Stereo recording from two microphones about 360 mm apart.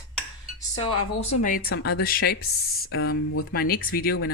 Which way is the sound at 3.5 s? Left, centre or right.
Left.